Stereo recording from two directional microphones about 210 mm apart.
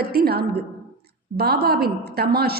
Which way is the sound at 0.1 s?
50° right (ahead or behind).